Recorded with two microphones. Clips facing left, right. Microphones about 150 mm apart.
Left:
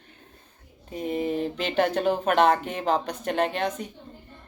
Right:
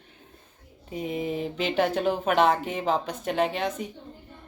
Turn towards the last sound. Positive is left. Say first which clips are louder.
# even
turn(degrees=-5)  # may be behind; listen again after turning